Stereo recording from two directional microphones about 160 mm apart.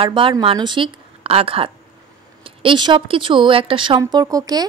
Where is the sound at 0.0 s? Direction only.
30° right (ahead or behind).